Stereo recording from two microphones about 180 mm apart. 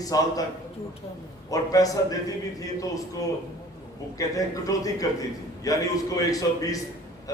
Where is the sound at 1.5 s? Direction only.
20° left (ahead or behind).